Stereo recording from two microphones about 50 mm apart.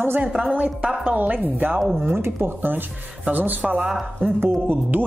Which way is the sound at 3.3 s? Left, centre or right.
Right.